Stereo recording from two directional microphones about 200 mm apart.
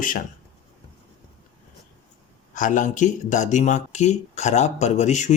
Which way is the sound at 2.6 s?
40° left (ahead or behind).